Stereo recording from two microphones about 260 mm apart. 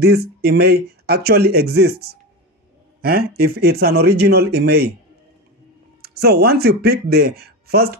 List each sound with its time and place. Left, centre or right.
0.0 s speech: right
6.0 s speech: right